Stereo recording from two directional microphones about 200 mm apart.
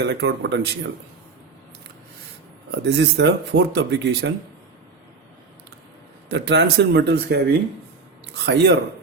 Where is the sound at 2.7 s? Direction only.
55° right (ahead or behind).